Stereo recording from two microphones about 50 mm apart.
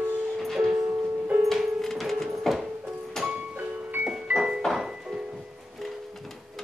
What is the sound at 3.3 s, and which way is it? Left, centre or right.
Music, right.